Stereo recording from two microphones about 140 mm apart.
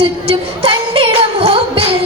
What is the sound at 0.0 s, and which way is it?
Music, 40° right (ahead or behind).